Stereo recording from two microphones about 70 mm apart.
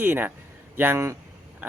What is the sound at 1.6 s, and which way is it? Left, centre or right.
Speech, right.